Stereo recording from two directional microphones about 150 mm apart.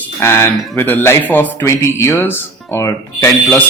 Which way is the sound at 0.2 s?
15° left (ahead or behind).